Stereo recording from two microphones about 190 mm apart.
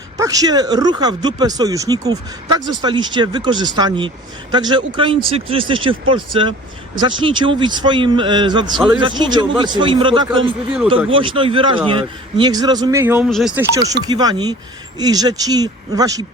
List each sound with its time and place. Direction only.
0.2 s speech: 20° right (ahead or behind); by 13.7 s 5° right (ahead or behind)
14.0 s speech: 20° right (ahead or behind)